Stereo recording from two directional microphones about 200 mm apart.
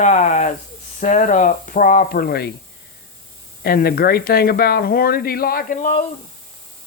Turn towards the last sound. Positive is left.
turn(degrees=45)  # may be behind; listen again after turning